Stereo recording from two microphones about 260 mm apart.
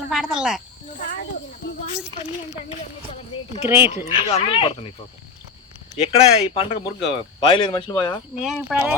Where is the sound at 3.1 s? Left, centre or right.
Left.